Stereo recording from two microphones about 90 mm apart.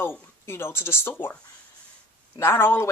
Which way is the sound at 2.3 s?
30° left (ahead or behind).